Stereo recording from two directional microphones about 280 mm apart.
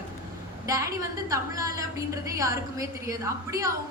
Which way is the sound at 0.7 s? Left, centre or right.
Centre.